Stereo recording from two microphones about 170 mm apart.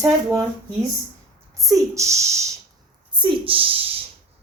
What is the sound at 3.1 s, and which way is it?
Speech, 30° right (ahead or behind).